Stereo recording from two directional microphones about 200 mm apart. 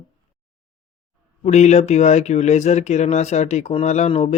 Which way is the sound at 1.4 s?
35° left (ahead or behind).